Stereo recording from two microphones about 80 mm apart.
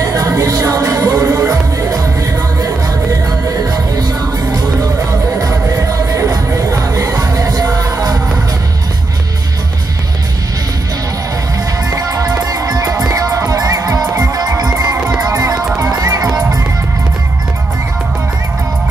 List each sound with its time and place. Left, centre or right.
0.0 s music: right
3.3 s music: right
11.9 s music: right